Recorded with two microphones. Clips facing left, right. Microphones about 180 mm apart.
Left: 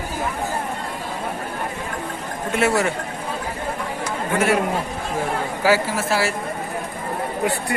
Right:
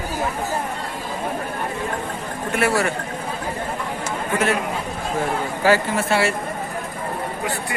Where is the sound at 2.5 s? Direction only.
20° left (ahead or behind).